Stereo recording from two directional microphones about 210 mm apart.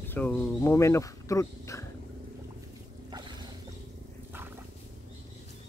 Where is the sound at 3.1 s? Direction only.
20° right (ahead or behind).